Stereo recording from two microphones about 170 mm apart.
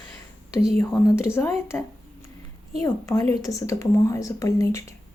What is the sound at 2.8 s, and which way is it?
Speech, 20° left (ahead or behind).